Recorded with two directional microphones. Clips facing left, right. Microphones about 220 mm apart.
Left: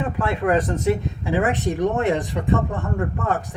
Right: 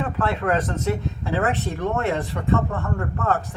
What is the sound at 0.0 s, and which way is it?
Speech, 15° left (ahead or behind).